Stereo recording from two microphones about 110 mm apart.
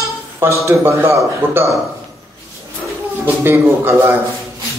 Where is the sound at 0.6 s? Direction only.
25° right (ahead or behind).